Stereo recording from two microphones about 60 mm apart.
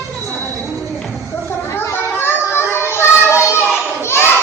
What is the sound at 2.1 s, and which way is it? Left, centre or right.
Children playing, left.